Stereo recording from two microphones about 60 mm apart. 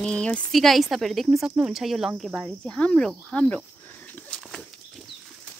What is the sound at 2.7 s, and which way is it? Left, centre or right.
Speech, centre.